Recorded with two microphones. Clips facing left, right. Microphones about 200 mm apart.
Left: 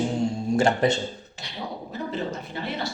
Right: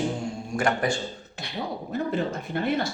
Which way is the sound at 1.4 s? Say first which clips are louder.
Right 3 dB; 55° right (ahead or behind).